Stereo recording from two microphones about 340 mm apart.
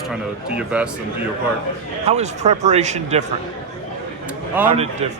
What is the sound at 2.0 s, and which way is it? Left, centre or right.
Speech, centre.